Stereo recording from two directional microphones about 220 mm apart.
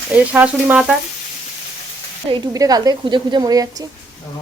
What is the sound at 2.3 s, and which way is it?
A woman's voice, 15° right (ahead or behind).